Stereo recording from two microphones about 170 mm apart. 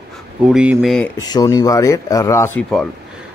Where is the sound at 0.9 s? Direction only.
10° left (ahead or behind).